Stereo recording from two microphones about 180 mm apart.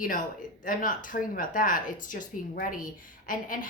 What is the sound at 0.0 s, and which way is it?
Speech, 50° left (ahead or behind).